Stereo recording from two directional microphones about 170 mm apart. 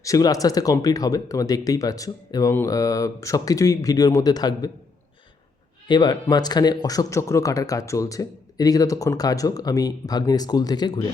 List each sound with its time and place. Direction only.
0.0 s speech: 20° left (ahead or behind)
5.9 s speech: 25° left (ahead or behind)